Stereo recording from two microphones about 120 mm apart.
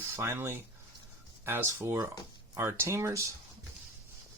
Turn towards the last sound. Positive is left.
turn(degrees=-25)  # may be behind; listen again after turning